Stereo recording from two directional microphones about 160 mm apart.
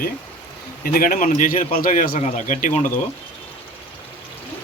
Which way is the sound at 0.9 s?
60° left (ahead or behind).